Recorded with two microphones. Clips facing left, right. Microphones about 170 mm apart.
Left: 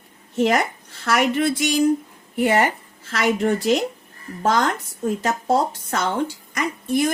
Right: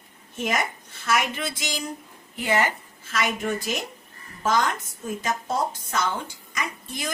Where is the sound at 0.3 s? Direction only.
65° left (ahead or behind).